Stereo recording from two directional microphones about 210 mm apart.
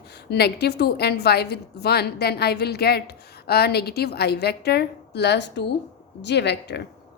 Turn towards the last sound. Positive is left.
turn(degrees=55)  # may be behind; listen again after turning